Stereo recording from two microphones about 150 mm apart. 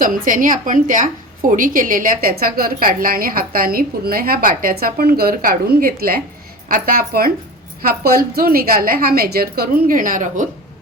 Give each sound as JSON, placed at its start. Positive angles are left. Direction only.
{"t": 0.0, "sound": "a woman's voice", "side_deg": -65}
{"t": 6.7, "sound": "a woman's voice", "side_deg": -75}